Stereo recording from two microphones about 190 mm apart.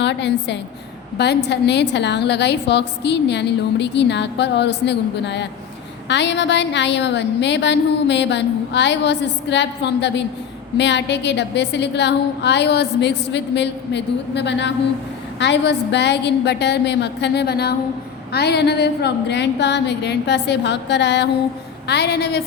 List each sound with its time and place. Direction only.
0.0 s a woman's voice: 65° left (ahead or behind)